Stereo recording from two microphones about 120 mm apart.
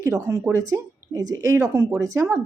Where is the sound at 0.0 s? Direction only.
25° right (ahead or behind).